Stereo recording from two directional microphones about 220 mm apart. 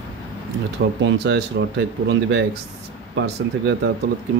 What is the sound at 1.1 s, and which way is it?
Speech, 50° right (ahead or behind).